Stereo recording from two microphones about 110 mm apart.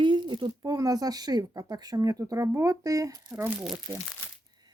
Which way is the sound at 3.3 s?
15° right (ahead or behind).